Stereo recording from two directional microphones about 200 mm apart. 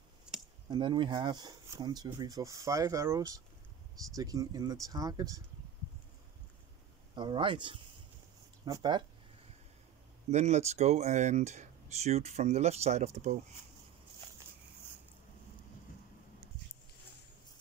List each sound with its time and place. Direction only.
0.3 s a sound: 5° right (ahead or behind)
0.7 s speech: 25° right (ahead or behind)
7.2 s speech: 25° right (ahead or behind)
10.3 s speech: 35° right (ahead or behind)